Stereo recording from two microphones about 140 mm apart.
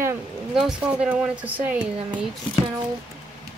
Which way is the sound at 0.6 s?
5° right (ahead or behind).